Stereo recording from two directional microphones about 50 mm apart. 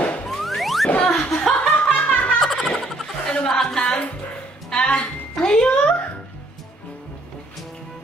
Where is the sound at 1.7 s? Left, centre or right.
Left.